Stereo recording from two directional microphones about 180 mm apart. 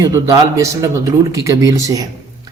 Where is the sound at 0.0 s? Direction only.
20° right (ahead or behind).